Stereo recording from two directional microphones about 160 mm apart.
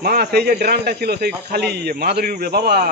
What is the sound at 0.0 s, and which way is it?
A man's voice, 75° right (ahead or behind).